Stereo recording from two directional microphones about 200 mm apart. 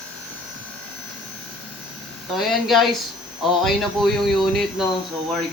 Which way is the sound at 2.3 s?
Centre (ahead or behind).